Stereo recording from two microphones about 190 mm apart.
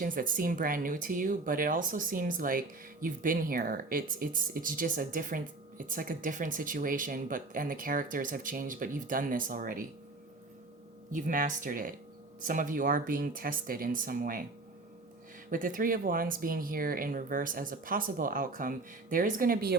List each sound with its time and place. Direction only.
0.0 s speech: 45° right (ahead or behind)
11.1 s speech: 45° right (ahead or behind)
15.4 s speech: 45° right (ahead or behind)